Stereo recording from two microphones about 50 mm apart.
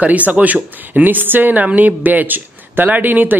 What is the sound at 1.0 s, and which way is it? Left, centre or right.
Speech, right.